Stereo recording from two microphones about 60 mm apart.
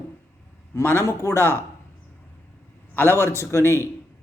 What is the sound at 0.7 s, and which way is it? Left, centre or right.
Speech, left.